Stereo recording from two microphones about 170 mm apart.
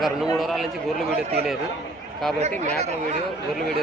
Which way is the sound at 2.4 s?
40° right (ahead or behind).